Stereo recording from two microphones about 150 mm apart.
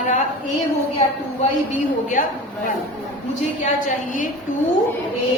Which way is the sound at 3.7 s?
60° left (ahead or behind).